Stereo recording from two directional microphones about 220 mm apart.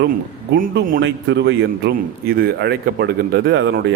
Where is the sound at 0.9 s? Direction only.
55° right (ahead or behind).